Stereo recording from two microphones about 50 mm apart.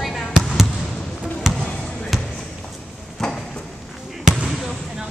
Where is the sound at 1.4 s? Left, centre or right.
Centre.